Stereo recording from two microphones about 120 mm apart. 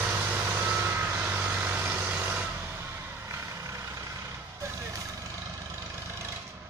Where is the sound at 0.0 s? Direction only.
15° right (ahead or behind).